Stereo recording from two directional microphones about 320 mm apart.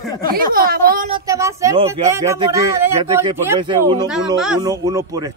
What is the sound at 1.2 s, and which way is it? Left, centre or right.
Speech, centre.